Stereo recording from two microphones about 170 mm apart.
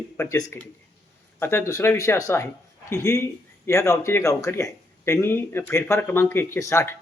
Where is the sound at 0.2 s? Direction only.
15° left (ahead or behind).